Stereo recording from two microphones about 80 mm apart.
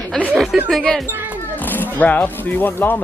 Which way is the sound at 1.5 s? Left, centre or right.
Left.